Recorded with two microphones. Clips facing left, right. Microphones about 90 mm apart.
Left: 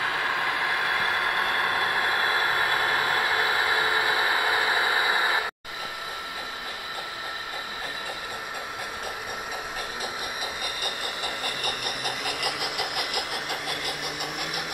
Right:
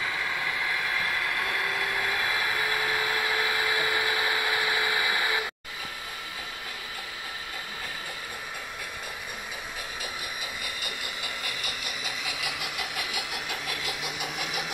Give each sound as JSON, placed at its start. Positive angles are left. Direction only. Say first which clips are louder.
{"t": 0.0, "sound": "vehicle", "louder": "left 4 dB", "side_deg": 55}
{"t": 10.8, "sound": "engine", "louder": "left 4 dB", "side_deg": 50}